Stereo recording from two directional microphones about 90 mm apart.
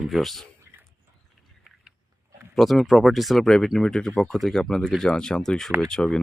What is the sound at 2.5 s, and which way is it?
Speech, centre (ahead or behind).